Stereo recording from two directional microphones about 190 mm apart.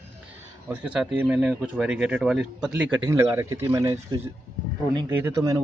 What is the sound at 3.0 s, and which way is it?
Speech, 15° right (ahead or behind).